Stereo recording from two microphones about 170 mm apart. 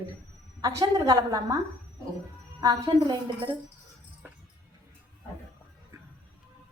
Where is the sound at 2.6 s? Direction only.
20° right (ahead or behind).